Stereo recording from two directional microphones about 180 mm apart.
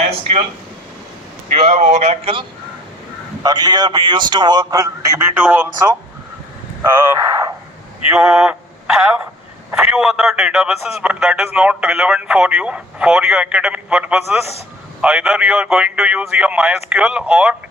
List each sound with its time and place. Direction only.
0.1 s speech: 35° right (ahead or behind)
1.5 s speech: 35° right (ahead or behind)
3.4 s a man's voice: 20° right (ahead or behind)
8.1 s speech: 5° right (ahead or behind)